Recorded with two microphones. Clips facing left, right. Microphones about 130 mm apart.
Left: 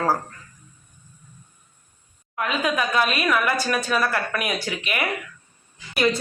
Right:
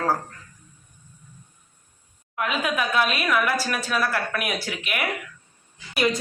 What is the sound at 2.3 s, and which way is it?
A woman's voice, 5° right (ahead or behind).